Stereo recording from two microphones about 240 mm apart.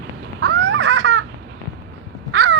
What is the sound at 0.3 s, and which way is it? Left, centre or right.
Baby laughter, right.